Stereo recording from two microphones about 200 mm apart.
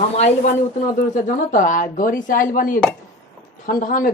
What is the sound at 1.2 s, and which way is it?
Speech, 40° left (ahead or behind).